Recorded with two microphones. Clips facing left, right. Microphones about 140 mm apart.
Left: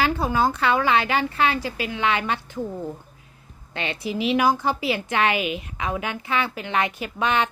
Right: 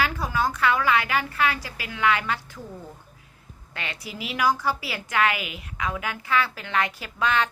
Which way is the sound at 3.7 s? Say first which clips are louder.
Left 8 dB; 25° left (ahead or behind).